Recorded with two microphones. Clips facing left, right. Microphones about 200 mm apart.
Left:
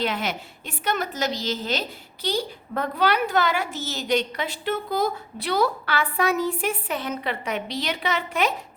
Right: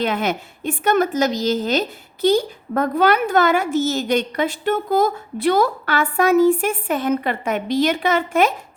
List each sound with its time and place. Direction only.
0.0 s a woman's voice: 50° right (ahead or behind)